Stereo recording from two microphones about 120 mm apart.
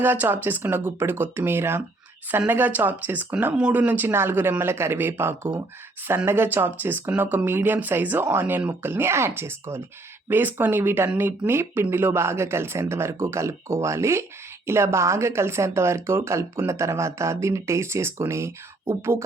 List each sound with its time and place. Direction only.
0.0 s speech: 15° right (ahead or behind)